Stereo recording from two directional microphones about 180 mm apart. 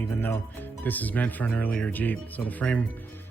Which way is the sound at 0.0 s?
10° left (ahead or behind).